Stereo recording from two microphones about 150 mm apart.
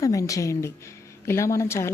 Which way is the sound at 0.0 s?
20° left (ahead or behind).